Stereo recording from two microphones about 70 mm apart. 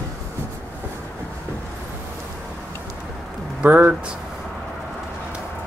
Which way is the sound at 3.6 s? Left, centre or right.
Right.